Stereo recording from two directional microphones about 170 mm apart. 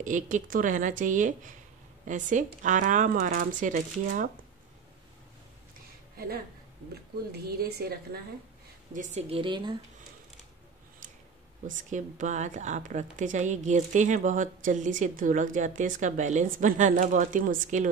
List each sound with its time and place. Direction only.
0.0 s a woman's voice: 50° right (ahead or behind)
6.1 s a woman's voice: 65° right (ahead or behind)
8.9 s a woman's voice: 45° right (ahead or behind)
9.3 s speech: 30° right (ahead or behind)
11.7 s a woman's voice: 45° right (ahead or behind)